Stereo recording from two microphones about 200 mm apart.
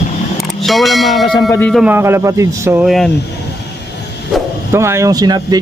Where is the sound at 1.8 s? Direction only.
10° right (ahead or behind).